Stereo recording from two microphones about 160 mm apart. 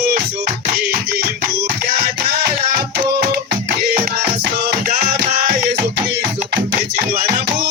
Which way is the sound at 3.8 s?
70° right (ahead or behind).